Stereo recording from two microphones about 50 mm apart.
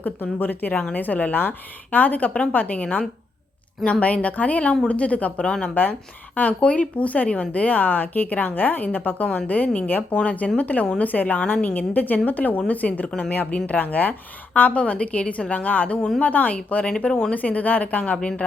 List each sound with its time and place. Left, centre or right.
0.0 s speech: left